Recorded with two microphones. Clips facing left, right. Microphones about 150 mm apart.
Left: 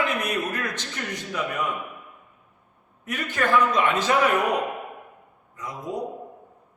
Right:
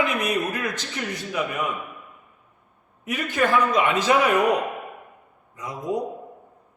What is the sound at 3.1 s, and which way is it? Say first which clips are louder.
A man's voice: right 2 dB; 10° right (ahead or behind).